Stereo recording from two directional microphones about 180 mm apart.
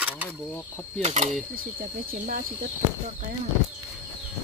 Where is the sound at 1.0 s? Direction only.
35° right (ahead or behind).